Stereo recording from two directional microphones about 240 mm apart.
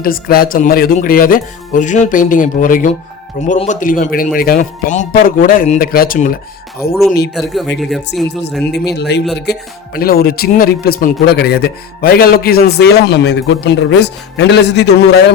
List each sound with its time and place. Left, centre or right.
0.0 s speech: left
7.3 s speech: centre
8.7 s a man's voice: left